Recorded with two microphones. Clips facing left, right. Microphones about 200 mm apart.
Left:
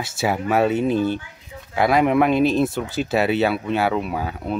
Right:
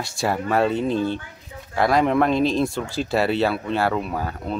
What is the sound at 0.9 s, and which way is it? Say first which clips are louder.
Speech: left 2 dB; 25° right (ahead or behind).